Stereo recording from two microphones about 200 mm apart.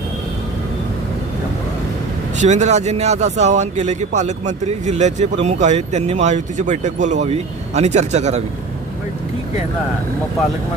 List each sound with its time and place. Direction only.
2.4 s a man's voice: 35° right (ahead or behind)